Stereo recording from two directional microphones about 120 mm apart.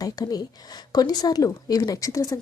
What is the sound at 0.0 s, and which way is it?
Speech, 30° left (ahead or behind).